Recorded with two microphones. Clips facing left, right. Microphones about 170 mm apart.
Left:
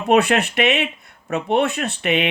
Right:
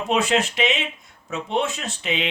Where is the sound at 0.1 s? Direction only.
60° left (ahead or behind).